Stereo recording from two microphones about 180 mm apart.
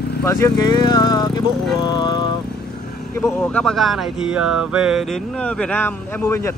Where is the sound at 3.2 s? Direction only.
5° left (ahead or behind).